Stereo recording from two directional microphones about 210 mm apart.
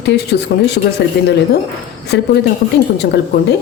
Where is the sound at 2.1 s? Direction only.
55° left (ahead or behind).